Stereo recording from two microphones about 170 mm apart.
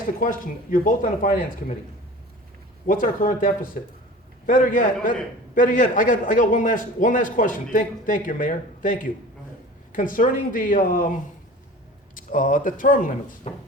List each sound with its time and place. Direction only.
0.2 s a man's voice: 55° left (ahead or behind)
2.8 s a man's voice: 55° left (ahead or behind)
12.1 s speech: 55° left (ahead or behind)
13.5 s speech: 40° left (ahead or behind)